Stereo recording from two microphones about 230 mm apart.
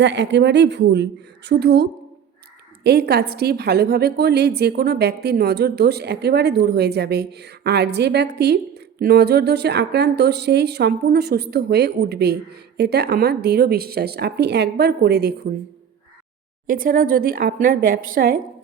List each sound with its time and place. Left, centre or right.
0.0 s a woman's voice: right
16.6 s a woman's voice: right